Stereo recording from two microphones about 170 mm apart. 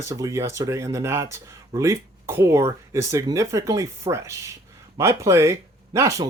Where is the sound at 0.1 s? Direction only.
20° right (ahead or behind).